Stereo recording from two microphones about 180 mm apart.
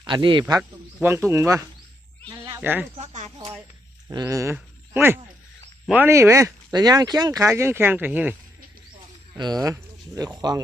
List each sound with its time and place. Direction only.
0.0 s speech: 25° right (ahead or behind)
2.3 s bleat: 20° right (ahead or behind)
2.6 s speech: 10° right (ahead or behind)
3.0 s speech: 40° right (ahead or behind)
4.1 s speech: 20° right (ahead or behind)
9.3 s speech: 20° right (ahead or behind)